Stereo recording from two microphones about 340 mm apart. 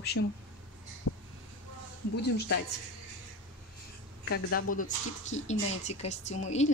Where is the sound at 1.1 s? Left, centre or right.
Left.